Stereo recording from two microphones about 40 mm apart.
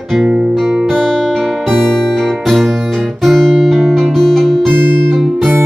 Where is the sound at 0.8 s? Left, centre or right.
Centre.